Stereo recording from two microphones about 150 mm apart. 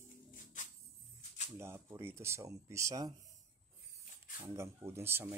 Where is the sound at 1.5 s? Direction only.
15° right (ahead or behind).